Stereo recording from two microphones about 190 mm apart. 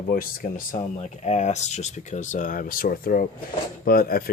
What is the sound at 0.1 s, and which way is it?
Speech, 50° left (ahead or behind).